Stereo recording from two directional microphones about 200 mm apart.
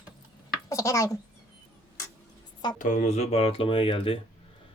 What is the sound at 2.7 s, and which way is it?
Speech, 40° left (ahead or behind).